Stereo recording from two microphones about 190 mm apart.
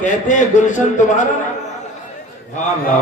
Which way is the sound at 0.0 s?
40° left (ahead or behind).